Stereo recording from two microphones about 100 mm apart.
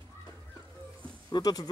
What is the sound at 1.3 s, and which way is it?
Speech, 45° left (ahead or behind).